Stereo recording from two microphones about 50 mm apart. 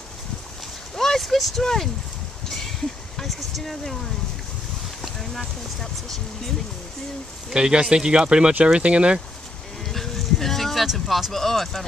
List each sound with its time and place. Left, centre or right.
0.9 s speech: centre
3.2 s speech: centre
7.4 s speech: centre
9.8 s bee: centre
11.1 s speech: centre